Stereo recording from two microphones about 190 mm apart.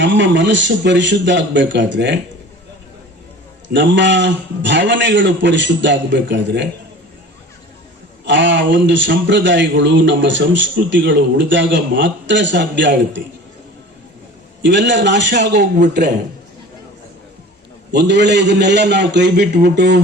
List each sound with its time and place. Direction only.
0.0 s a man's voice: 70° right (ahead or behind)
3.7 s a man's voice: 70° right (ahead or behind)
8.2 s a man's voice: 75° right (ahead or behind)
14.6 s a man's voice: 70° right (ahead or behind)
17.9 s a man's voice: 65° right (ahead or behind)